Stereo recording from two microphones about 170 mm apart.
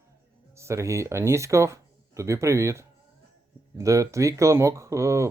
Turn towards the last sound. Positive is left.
turn(degrees=-15)  # may be behind; listen again after turning